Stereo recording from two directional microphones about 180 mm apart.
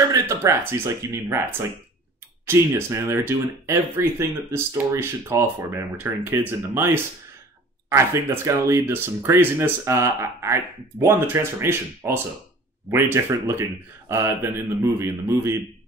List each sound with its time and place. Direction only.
0.1 s speech: 15° right (ahead or behind)